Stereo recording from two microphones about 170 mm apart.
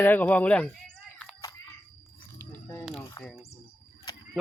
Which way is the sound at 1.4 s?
15° left (ahead or behind).